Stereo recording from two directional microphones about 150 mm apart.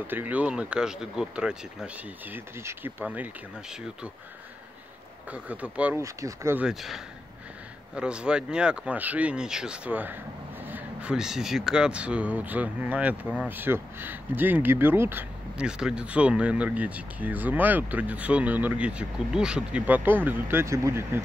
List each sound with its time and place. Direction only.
0.0 s speech: 10° right (ahead or behind)
5.3 s speech: 10° right (ahead or behind)
6.0 s speech: 20° right (ahead or behind)
6.6 s speech: centre (ahead or behind); by 21.2 s 20° right (ahead or behind)